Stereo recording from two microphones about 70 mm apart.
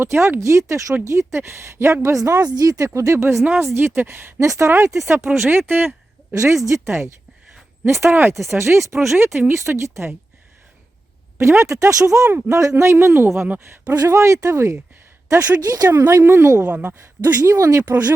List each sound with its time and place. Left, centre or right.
0.0 s a woman's voice: right
3.4 s speech: right
6.3 s a woman's voice: right
11.3 s a woman's voice: right
15.3 s a woman's voice: right
15.9 s a woman's voice: right
16.2 s speech: right
16.6 s speech: right
17.4 s a woman's voice: right